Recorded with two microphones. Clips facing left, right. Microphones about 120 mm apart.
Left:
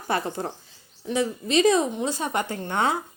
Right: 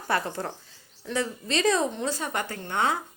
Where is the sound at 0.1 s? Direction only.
20° left (ahead or behind).